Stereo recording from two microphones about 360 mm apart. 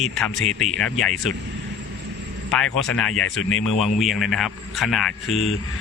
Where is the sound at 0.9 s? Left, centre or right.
Left.